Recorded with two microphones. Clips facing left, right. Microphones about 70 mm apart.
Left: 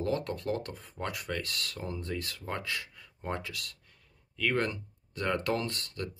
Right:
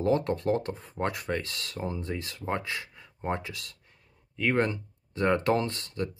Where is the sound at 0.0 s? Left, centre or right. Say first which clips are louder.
Right 6 dB; right.